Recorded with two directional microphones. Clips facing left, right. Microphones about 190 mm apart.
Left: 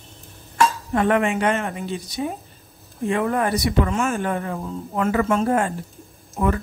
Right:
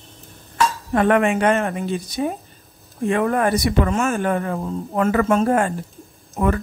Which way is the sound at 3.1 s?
60° right (ahead or behind).